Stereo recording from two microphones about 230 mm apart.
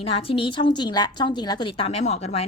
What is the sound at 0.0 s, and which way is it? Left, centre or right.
A woman's voice, left.